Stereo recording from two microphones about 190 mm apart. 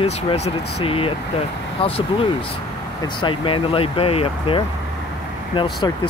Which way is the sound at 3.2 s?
25° left (ahead or behind).